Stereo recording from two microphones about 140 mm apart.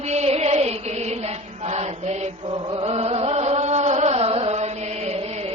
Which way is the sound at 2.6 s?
35° right (ahead or behind).